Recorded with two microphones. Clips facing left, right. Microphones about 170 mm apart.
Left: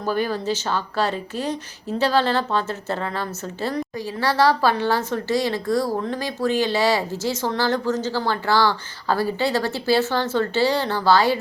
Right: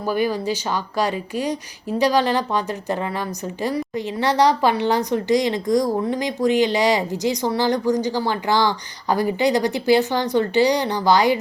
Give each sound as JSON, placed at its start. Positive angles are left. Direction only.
{"t": 0.0, "sound": "speech", "side_deg": -10}